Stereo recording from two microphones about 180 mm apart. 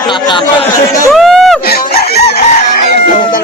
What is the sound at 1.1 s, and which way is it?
Speech, centre (ahead or behind).